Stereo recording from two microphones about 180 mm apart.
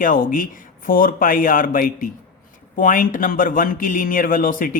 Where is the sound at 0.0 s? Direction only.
50° left (ahead or behind).